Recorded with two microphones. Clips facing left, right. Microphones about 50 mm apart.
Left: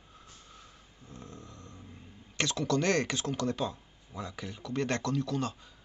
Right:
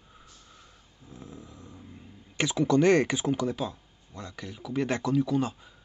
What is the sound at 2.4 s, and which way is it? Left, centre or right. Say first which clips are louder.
Speech: right 6 dB; centre.